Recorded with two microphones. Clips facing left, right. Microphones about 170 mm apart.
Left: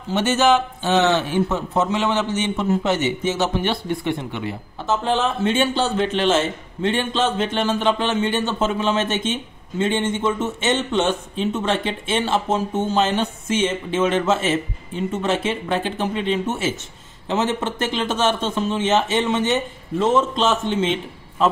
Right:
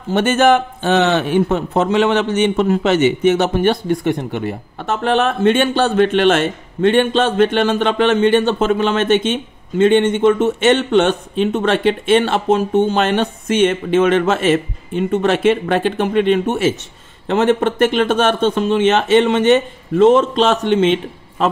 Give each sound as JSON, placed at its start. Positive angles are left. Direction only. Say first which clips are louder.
{"t": 0.1, "sound": "a man's voice", "louder": "right 4 dB", "side_deg": -55}